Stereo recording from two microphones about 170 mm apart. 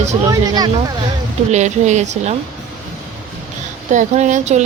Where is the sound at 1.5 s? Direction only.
45° right (ahead or behind).